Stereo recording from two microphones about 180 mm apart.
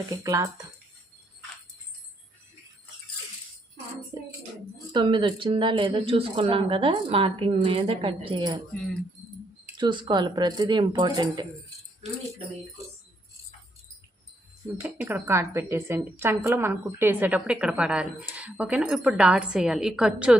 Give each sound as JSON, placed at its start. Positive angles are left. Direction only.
{"t": 0.2, "sound": "speech", "side_deg": -20}
{"t": 4.1, "sound": "music", "side_deg": -20}
{"t": 4.9, "sound": "speech", "side_deg": -25}
{"t": 9.7, "sound": "speech", "side_deg": -25}
{"t": 14.8, "sound": "speech", "side_deg": -10}